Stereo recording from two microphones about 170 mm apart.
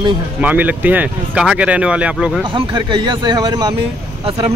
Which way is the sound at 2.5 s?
30° right (ahead or behind).